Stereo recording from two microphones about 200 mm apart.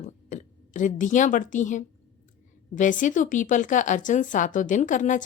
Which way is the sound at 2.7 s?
40° left (ahead or behind).